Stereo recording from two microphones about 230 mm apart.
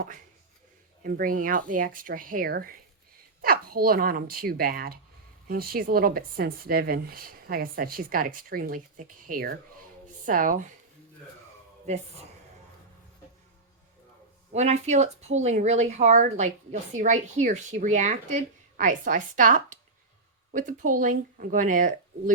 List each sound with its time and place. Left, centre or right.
1.0 s speech: right
14.5 s speech: right